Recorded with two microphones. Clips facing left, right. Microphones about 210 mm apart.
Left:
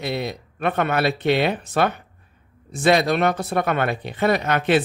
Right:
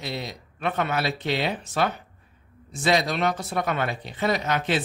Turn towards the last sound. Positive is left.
turn(degrees=60)  # may be behind; listen again after turning